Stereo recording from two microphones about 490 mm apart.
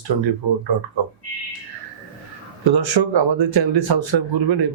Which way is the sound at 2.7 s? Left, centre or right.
Right.